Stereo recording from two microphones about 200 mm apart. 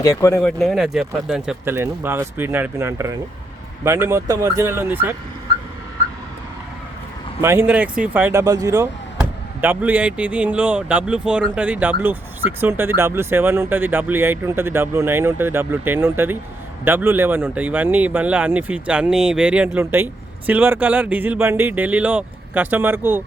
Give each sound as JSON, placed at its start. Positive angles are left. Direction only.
{"t": 0.0, "sound": "speech", "side_deg": 15}
{"t": 0.4, "sound": "speech", "side_deg": 0}
{"t": 7.4, "sound": "speech", "side_deg": -10}